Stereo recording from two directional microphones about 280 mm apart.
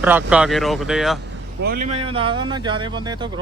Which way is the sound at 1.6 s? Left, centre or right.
Right.